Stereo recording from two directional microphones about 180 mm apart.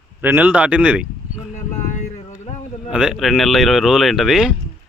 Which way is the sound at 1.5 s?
45° left (ahead or behind).